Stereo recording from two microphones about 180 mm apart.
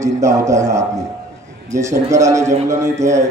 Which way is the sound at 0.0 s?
15° right (ahead or behind).